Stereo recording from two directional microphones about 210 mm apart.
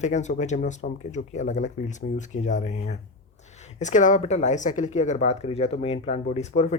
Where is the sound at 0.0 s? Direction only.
35° left (ahead or behind).